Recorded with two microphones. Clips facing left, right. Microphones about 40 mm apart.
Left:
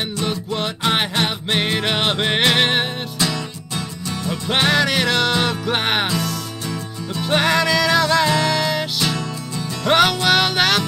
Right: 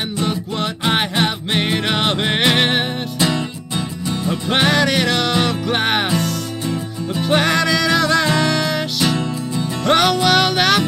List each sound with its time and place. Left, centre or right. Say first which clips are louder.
0.2 s music: right 2 dB; centre
3.2 s music: right 4 dB; right
4.5 s music: right 1 dB; centre
7.2 s music: right 1 dB; centre